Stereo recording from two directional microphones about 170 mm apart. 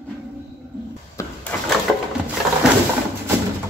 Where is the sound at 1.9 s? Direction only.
Centre (ahead or behind).